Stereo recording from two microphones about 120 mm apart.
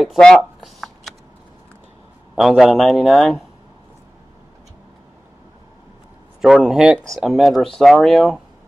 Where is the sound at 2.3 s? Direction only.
5° right (ahead or behind).